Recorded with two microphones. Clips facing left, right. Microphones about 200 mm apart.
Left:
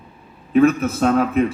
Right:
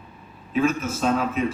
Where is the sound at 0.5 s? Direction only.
60° left (ahead or behind).